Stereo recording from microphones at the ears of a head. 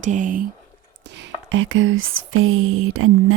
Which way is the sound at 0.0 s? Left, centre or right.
Right.